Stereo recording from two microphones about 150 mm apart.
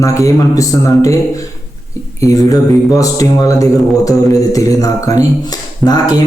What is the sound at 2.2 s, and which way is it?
A man's voice, 20° left (ahead or behind).